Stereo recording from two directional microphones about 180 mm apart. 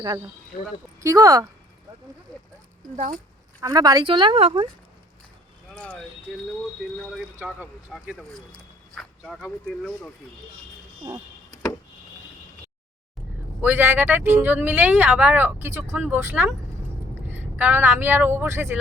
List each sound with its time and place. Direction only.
1.0 s speech: 20° right (ahead or behind)
2.3 s a sound: 20° right (ahead or behind)
2.9 s speech: 45° right (ahead or behind)
3.6 s speech: 20° right (ahead or behind)
5.7 s speech: 5° left (ahead or behind)
7.0 s speech: centre (ahead or behind)
9.0 s speech: 5° left (ahead or behind)
13.7 s speech: 10° right (ahead or behind)